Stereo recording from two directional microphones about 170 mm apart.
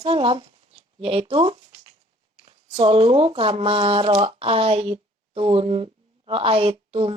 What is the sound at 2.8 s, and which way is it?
Speech, 30° right (ahead or behind).